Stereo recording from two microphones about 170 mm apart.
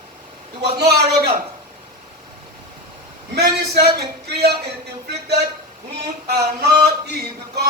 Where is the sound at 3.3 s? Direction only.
70° right (ahead or behind).